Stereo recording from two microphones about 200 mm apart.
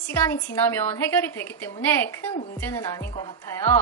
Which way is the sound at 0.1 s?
10° left (ahead or behind).